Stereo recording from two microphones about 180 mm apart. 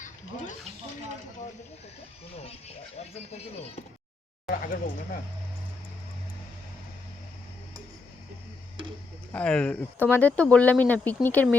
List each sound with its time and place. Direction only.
2.4 s speech: 35° left (ahead or behind)
4.4 s speech: 50° left (ahead or behind)
9.3 s speech: 5° left (ahead or behind)